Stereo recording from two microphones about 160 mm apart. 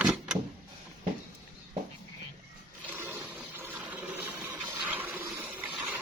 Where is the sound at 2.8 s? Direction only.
15° right (ahead or behind).